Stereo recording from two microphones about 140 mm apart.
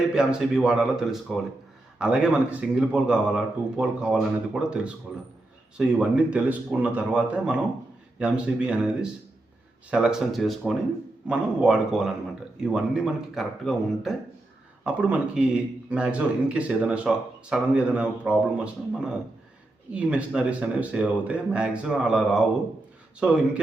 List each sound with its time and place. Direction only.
0.1 s a man's voice: 5° right (ahead or behind)